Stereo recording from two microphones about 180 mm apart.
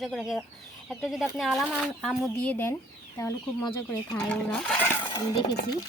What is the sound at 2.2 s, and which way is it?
Speech, 10° left (ahead or behind).